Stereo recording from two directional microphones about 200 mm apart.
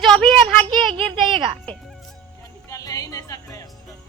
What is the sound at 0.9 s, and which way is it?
Speech, 25° right (ahead or behind).